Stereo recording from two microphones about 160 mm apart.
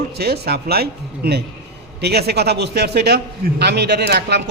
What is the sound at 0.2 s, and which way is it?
A man's voice, 80° right.